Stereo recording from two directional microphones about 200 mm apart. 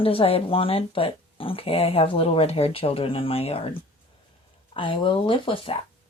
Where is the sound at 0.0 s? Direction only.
30° left (ahead or behind).